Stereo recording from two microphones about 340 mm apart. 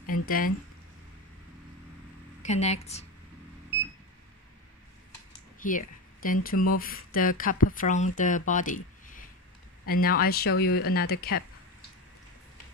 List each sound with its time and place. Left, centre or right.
0.0 s a sound: left
2.4 s speech: centre
5.6 s speech: left